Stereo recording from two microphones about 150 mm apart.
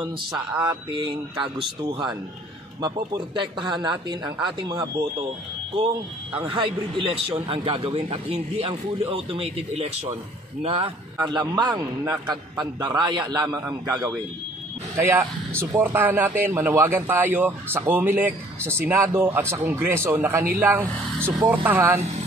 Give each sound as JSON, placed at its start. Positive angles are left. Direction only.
{"t": 0.7, "sound": "a man's voice", "side_deg": -30}
{"t": 6.3, "sound": "a man's voice", "side_deg": -30}
{"t": 11.1, "sound": "a man's voice", "side_deg": -30}
{"t": 11.8, "sound": "speech", "side_deg": -15}
{"t": 12.3, "sound": "a man's voice", "side_deg": -30}